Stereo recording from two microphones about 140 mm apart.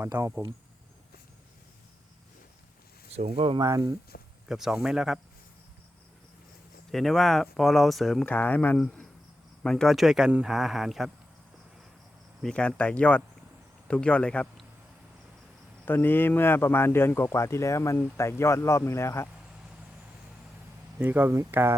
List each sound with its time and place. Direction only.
0.0 s speech: 20° right (ahead or behind)
3.3 s speech: 40° right (ahead or behind)
3.6 s speech: 25° right (ahead or behind)
4.4 s speech: 5° right (ahead or behind)
6.9 s speech: centre (ahead or behind)
8.3 s speech: 10° left (ahead or behind)
12.4 s speech: 5° left (ahead or behind)
15.9 s speech: 15° left (ahead or behind)
21.0 s speech: 15° right (ahead or behind)